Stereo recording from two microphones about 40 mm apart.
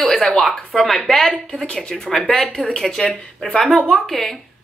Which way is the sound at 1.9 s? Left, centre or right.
Centre.